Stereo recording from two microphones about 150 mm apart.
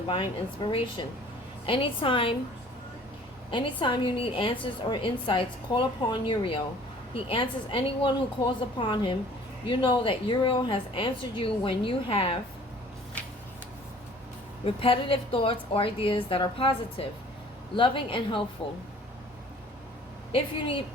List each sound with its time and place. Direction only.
0.1 s a woman's voice: 35° left (ahead or behind)
3.5 s a woman's voice: 35° left (ahead or behind)
14.6 s a woman's voice: 35° left (ahead or behind)